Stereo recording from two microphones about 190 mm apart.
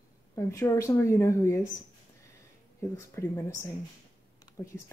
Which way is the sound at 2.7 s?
15° left (ahead or behind).